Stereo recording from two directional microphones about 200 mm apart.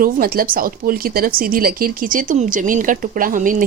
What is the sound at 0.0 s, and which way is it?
Speech, 45° right (ahead or behind).